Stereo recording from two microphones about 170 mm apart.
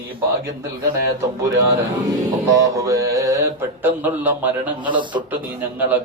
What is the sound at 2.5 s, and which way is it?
Mantra, 20° right (ahead or behind).